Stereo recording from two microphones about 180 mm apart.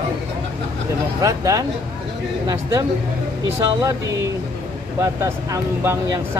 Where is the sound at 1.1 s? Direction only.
20° right (ahead or behind).